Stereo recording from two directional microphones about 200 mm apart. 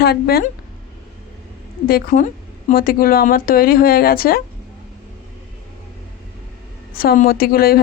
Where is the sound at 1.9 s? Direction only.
45° left (ahead or behind).